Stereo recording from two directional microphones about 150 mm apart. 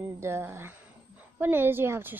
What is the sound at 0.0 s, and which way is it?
A woman's voice, 15° right (ahead or behind).